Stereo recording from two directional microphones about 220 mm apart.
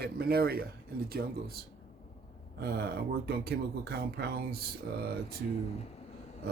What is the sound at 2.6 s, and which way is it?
Speech, 45° right (ahead or behind).